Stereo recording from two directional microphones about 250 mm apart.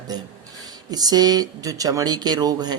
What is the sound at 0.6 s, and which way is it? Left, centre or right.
A man's voice, centre.